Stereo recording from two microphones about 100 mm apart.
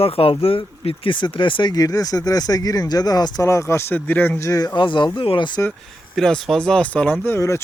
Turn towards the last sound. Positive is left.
turn(degrees=30)  # may be behind; listen again after turning